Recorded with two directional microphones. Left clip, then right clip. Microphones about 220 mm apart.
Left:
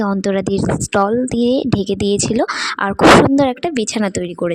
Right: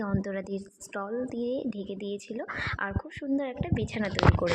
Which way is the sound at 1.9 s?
60° left (ahead or behind).